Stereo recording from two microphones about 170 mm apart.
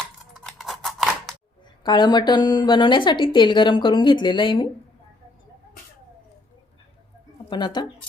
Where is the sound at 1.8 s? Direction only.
25° left (ahead or behind).